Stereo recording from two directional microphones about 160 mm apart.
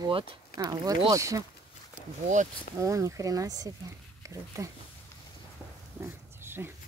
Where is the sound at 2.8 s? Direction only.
20° right (ahead or behind).